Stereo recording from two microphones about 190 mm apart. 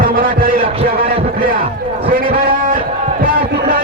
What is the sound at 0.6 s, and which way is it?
Heart sounds, 30° right (ahead or behind).